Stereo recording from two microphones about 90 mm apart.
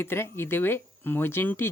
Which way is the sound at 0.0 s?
25° left (ahead or behind).